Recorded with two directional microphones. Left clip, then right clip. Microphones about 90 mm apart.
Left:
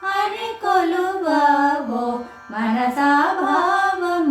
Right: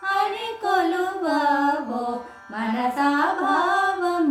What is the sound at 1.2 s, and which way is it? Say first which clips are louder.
Music: left 5 dB; 35° right (ahead or behind).